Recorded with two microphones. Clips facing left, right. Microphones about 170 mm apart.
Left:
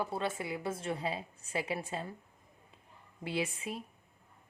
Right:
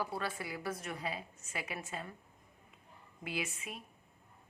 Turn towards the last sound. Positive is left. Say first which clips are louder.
# left 5 dB
turn(degrees=30)  # may be behind; listen again after turning